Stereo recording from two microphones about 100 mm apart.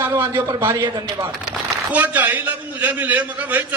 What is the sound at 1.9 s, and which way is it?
A man's voice, 15° right (ahead or behind).